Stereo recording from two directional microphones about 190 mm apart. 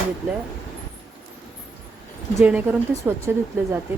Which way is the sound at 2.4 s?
5° right (ahead or behind).